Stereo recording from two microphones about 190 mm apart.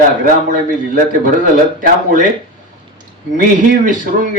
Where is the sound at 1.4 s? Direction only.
45° right (ahead or behind).